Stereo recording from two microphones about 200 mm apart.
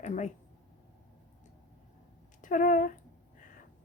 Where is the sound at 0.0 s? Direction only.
35° left (ahead or behind).